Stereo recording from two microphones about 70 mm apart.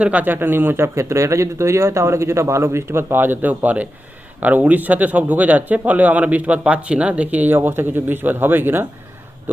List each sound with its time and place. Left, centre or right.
0.0 s speech: right